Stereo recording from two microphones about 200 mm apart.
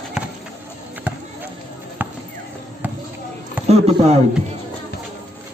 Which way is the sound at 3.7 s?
30° right (ahead or behind).